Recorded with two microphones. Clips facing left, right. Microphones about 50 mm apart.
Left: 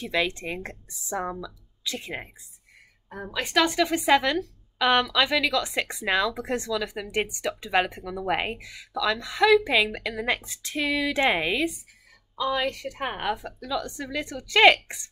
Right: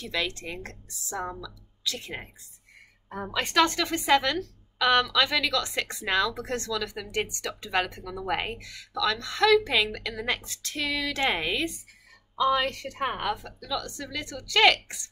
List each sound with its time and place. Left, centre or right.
0.0 s a woman's voice: left
3.1 s a woman's voice: centre
3.3 s a woman's voice: centre; by 15.0 s left